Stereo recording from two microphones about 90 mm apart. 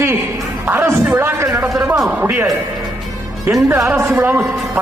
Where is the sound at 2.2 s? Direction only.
20° right (ahead or behind).